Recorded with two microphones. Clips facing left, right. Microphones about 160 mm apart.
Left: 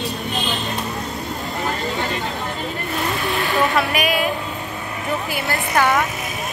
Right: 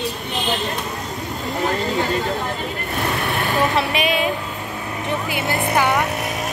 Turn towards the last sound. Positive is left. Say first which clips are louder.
# right 1 dB
turn(degrees=-20)  # may be behind; listen again after turning